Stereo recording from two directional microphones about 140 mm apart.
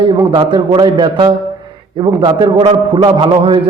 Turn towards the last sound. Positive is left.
turn(degrees=-35)  # may be behind; listen again after turning